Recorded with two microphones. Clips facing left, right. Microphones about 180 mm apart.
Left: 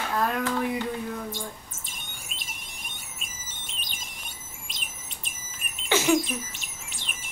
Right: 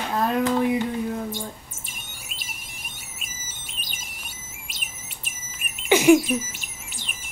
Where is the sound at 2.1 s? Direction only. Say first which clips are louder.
Even; 5° right (ahead or behind).